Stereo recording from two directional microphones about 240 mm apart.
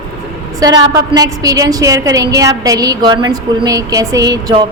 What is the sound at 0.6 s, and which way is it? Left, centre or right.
A woman's voice, centre.